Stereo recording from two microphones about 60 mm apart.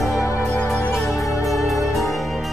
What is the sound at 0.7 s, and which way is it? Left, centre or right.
Music, centre.